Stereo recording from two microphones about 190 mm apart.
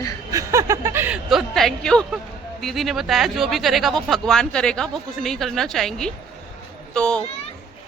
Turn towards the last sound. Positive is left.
turn(degrees=5)  # may be behind; listen again after turning